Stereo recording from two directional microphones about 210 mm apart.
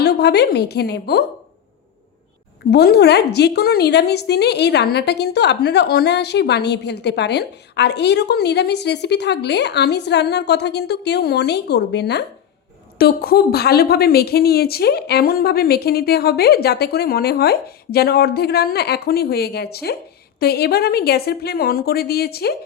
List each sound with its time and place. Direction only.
0.0 s a woman's voice: 50° left (ahead or behind)
2.6 s a woman's voice: 50° left (ahead or behind)